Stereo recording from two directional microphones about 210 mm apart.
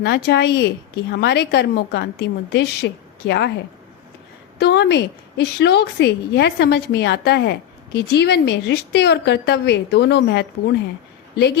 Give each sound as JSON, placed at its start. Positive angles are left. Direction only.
{"t": 0.0, "sound": "a woman's voice", "side_deg": 50}
{"t": 4.6, "sound": "a woman's voice", "side_deg": 50}